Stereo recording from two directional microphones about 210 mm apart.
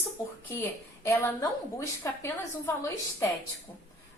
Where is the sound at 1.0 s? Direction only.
15° left (ahead or behind).